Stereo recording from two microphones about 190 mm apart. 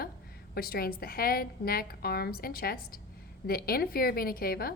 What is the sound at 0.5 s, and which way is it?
A woman's voice, 55° left (ahead or behind).